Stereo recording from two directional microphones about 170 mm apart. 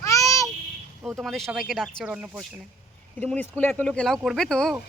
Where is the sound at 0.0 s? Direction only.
20° left (ahead or behind).